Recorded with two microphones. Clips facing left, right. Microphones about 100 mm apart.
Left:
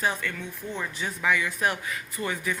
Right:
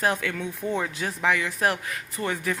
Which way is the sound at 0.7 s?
60° right (ahead or behind).